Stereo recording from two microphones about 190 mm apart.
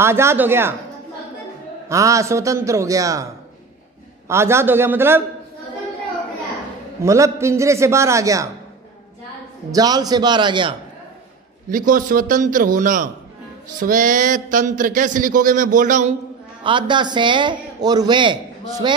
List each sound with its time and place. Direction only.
0.0 s a man's voice: 15° right (ahead or behind)
1.9 s a man's voice: 15° right (ahead or behind)
4.3 s a man's voice: 15° right (ahead or behind)
7.0 s a man's voice: 15° right (ahead or behind)
9.7 s a man's voice: 20° right (ahead or behind)
11.7 s speech: 45° right (ahead or behind)
16.6 s a man's voice: 25° right (ahead or behind)